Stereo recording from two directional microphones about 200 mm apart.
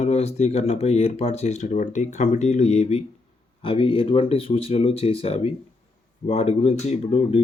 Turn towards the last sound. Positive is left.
turn(degrees=30)  # may be behind; listen again after turning